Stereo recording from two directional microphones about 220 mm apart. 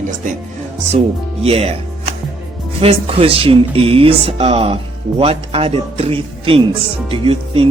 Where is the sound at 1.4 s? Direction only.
25° right (ahead or behind).